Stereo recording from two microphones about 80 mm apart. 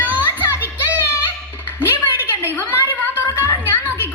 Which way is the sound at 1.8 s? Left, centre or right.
Right.